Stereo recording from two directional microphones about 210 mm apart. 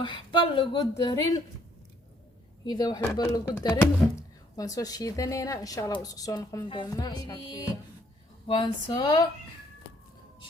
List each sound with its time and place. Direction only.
0.0 s speech: 25° left (ahead or behind)
2.6 s a woman's voice: 20° left (ahead or behind)